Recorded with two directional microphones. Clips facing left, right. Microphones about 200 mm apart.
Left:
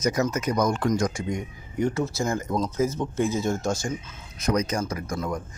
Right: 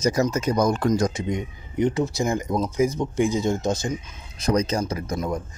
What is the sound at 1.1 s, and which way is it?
Speech, 20° right (ahead or behind).